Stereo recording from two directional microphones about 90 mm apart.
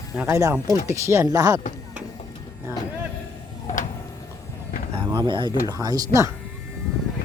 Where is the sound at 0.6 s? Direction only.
35° right (ahead or behind).